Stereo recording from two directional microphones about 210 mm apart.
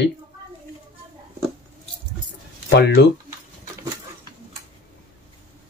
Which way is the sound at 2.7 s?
55° left (ahead or behind).